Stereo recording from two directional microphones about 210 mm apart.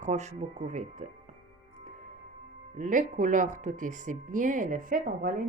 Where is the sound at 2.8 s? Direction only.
40° right (ahead or behind).